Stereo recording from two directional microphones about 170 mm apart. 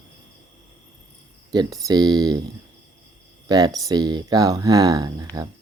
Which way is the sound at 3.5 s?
20° right (ahead or behind).